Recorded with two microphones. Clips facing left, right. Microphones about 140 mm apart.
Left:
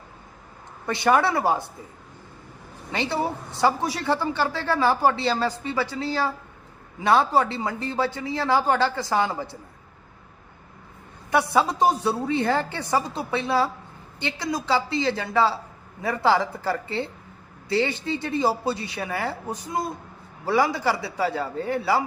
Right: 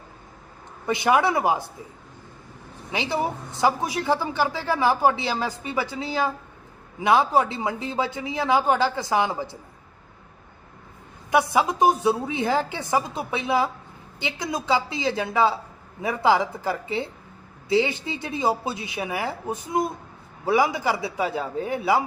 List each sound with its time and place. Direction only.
1.0 s a woman's voice: 10° right (ahead or behind)
3.1 s a woman's voice: 15° right (ahead or behind)
7.3 s a woman's voice: 15° right (ahead or behind)
11.6 s a woman's voice: 20° right (ahead or behind)